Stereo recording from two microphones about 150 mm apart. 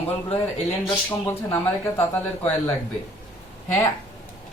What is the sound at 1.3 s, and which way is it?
A man's voice, 15° left (ahead or behind).